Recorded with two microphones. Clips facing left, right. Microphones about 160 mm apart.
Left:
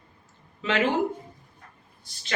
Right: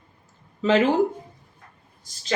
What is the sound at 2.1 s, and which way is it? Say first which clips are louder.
Speech: even; 40° right (ahead or behind).